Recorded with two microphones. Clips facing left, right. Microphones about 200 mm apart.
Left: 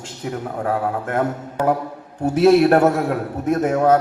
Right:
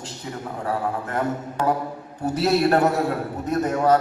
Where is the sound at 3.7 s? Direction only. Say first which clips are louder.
Left 3 dB; 55° left (ahead or behind).